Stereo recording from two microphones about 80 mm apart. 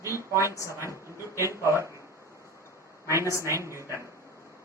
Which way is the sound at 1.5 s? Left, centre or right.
Right.